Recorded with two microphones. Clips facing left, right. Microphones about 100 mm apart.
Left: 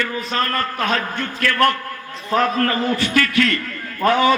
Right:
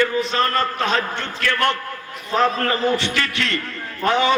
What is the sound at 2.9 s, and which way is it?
A man's voice, 25° right (ahead or behind).